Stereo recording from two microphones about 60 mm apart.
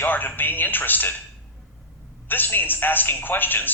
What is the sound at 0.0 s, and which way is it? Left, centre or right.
Speech, left.